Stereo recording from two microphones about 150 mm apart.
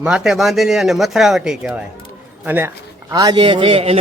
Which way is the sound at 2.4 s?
15° right (ahead or behind).